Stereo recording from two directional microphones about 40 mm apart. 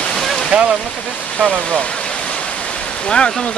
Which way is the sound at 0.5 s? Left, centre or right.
Right.